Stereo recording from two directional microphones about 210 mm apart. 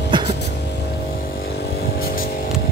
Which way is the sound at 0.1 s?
20° right (ahead or behind).